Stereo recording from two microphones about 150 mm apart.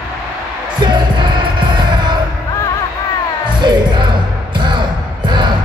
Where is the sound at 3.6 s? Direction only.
30° right (ahead or behind).